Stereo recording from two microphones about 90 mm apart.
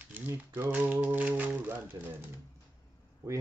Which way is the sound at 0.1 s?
20° right (ahead or behind).